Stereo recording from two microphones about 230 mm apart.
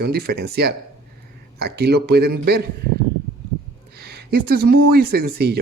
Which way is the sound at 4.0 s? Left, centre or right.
Right.